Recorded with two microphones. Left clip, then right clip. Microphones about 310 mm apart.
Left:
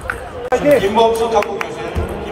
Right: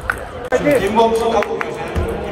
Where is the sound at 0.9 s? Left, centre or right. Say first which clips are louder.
Left 1 dB; left.